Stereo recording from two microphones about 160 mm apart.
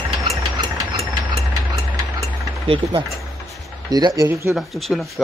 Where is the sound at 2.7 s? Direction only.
30° right (ahead or behind).